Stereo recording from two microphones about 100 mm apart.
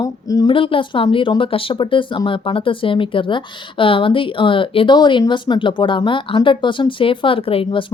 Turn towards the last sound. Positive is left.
turn(degrees=60)  # may be behind; listen again after turning